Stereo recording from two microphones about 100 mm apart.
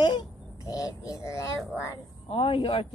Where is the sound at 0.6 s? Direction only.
35° left (ahead or behind).